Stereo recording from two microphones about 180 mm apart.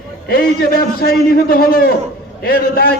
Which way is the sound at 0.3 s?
55° left (ahead or behind).